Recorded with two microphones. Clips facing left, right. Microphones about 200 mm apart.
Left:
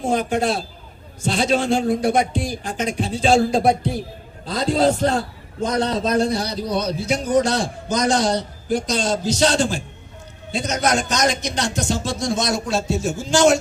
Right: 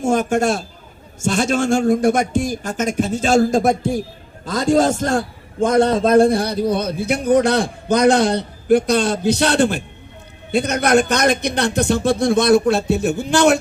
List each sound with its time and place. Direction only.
0.0 s a man's voice: 45° right (ahead or behind)